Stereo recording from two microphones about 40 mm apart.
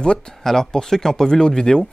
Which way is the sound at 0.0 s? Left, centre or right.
Left.